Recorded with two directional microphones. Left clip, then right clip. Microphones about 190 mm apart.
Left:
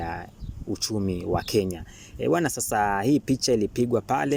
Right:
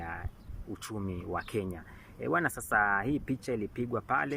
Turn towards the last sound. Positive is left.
turn(degrees=30)  # may be behind; listen again after turning